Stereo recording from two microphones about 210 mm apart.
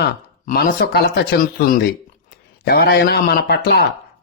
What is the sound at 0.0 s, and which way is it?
A man's voice, 45° left (ahead or behind).